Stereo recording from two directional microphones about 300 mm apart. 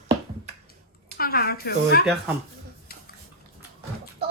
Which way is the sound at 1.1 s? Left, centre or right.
Left.